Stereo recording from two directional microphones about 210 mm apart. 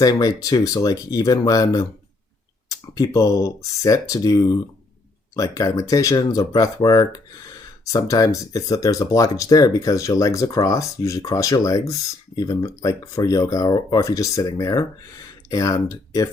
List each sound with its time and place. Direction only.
0.0 s speech: 20° left (ahead or behind)